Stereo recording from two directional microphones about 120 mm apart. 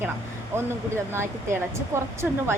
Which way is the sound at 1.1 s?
20° right (ahead or behind).